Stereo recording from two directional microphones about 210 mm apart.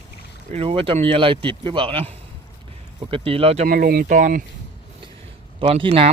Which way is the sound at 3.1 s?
25° right (ahead or behind).